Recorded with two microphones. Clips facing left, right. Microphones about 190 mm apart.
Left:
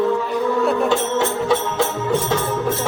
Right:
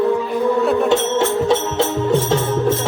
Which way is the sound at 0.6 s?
Centre (ahead or behind).